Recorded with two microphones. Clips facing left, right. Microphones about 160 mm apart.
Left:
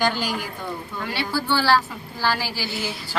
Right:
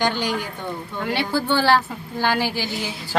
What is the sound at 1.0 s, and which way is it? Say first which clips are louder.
A woman's voice: right 3 dB; 50° right (ahead or behind).